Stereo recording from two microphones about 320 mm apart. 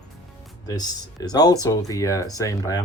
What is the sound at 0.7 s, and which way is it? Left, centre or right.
Speech, centre.